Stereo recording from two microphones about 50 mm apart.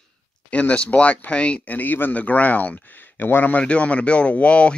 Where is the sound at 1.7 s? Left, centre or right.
Left.